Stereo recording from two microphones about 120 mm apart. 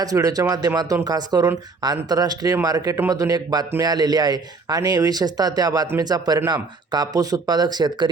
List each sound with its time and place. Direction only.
0.0 s speech: 30° right (ahead or behind)